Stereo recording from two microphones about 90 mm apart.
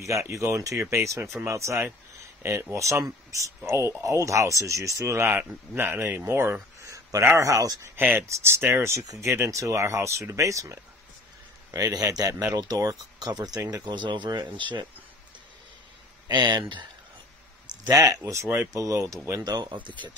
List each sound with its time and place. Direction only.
0.0 s speech: 35° right (ahead or behind)
7.8 s speech: 20° right (ahead or behind); by 14.9 s 60° right (ahead or behind)
16.3 s speech: 55° right (ahead or behind)
17.8 s speech: 40° right (ahead or behind)
19.4 s speech: 50° right (ahead or behind)